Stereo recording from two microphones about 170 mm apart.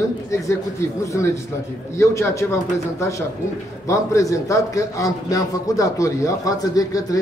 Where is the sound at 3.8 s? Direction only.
20° left (ahead or behind).